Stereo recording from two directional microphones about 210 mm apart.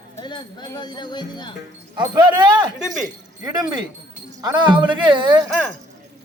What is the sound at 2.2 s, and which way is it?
Speech, 20° right (ahead or behind).